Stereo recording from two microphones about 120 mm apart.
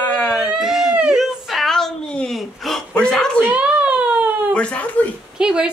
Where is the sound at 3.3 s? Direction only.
10° right (ahead or behind).